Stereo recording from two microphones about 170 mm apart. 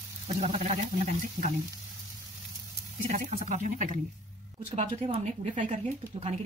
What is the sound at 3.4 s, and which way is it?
Speech, 45° right (ahead or behind).